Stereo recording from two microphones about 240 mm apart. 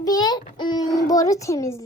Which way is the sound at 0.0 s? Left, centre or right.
Centre.